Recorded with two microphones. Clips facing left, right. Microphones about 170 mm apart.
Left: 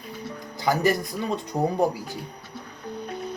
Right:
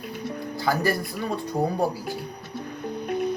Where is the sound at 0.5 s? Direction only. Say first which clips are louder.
Left 2 dB; 20° left (ahead or behind).